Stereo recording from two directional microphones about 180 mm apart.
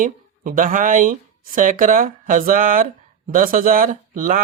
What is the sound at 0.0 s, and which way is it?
Speech, 45° right (ahead or behind).